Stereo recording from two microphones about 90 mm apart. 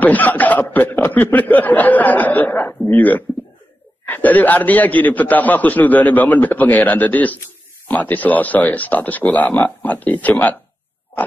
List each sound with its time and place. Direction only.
0.0 s speech: 20° left (ahead or behind)